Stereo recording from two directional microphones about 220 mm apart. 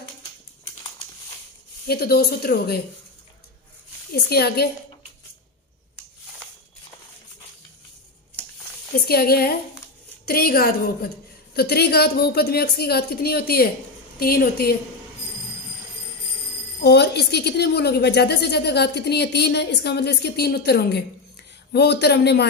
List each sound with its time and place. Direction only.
1.9 s speech: 45° left (ahead or behind)
4.1 s speech: 45° left (ahead or behind)
9.0 s speech: 45° left (ahead or behind)
16.8 s speech: 50° left (ahead or behind)